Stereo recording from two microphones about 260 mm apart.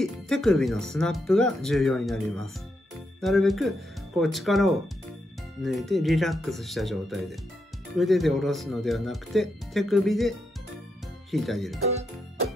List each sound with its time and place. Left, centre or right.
0.0 s speech: centre
11.3 s speech: centre